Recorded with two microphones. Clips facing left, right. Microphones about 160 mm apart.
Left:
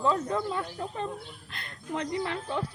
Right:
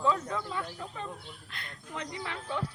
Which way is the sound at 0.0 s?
35° left (ahead or behind).